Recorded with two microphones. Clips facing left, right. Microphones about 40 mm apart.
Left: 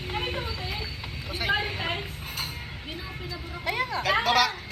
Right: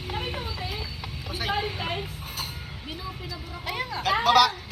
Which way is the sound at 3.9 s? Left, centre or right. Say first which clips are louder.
Right 3 dB; left.